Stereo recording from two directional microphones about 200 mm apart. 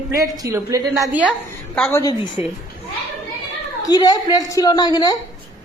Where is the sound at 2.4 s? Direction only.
10° right (ahead or behind).